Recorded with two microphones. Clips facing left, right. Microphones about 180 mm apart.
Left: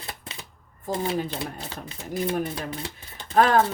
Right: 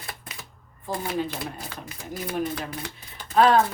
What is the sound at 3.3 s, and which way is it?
Speech, 50° left (ahead or behind).